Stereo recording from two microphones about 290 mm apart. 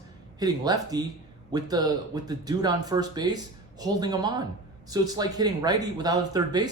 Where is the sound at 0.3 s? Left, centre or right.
Centre.